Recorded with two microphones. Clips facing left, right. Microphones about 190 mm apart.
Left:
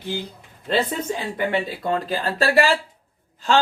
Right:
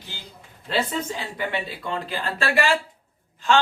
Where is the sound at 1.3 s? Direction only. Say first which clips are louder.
Left 6 dB; 45° left (ahead or behind).